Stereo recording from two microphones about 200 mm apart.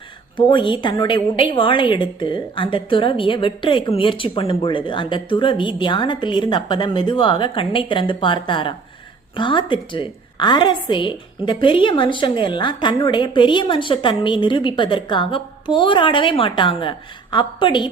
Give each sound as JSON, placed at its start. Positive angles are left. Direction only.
{"t": 0.3, "sound": "a woman's voice", "side_deg": 25}